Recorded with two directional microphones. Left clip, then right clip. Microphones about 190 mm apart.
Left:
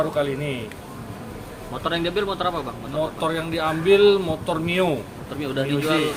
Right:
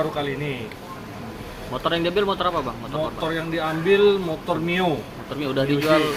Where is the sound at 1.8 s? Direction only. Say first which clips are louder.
Right 2 dB; 45° right (ahead or behind).